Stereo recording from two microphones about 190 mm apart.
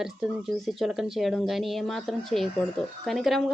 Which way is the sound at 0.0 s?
5° right (ahead or behind).